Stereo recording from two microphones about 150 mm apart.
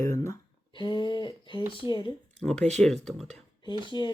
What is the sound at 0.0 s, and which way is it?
Speech, 20° left (ahead or behind).